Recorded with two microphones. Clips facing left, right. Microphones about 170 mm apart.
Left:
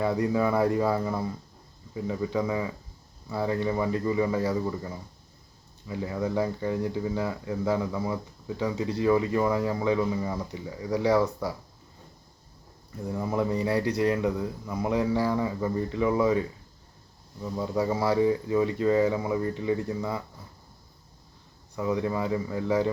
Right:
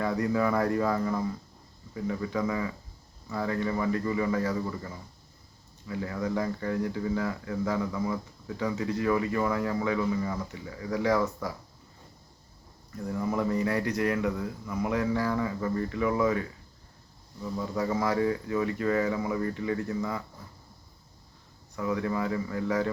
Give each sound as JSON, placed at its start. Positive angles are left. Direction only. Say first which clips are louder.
{"t": 0.0, "sound": "speech", "louder": "left 2 dB", "side_deg": 20}
{"t": 13.1, "sound": "speech", "louder": "left 1 dB", "side_deg": 20}
{"t": 17.4, "sound": "speech", "louder": "left 3 dB", "side_deg": 20}
{"t": 21.8, "sound": "speech", "louder": "left 2 dB", "side_deg": 20}